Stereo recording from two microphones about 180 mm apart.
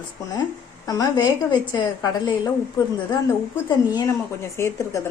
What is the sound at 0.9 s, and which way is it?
A woman's voice, 20° left (ahead or behind).